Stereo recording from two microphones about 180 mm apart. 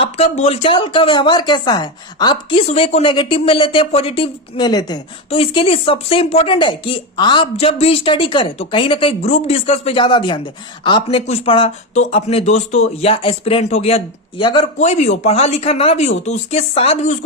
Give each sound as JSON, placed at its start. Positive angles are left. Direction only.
{"t": 0.0, "sound": "a woman's voice", "side_deg": 35}
{"t": 14.8, "sound": "a woman's voice", "side_deg": 40}